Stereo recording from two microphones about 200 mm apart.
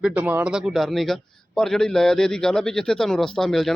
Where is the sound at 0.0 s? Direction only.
5° right (ahead or behind).